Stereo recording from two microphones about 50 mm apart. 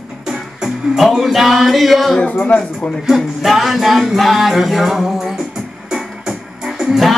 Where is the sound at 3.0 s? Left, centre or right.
Centre.